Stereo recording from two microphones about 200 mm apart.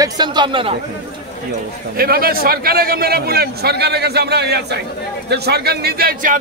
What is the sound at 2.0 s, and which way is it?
A man's voice, 50° right (ahead or behind).